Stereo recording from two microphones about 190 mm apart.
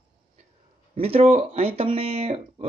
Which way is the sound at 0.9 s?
30° right (ahead or behind).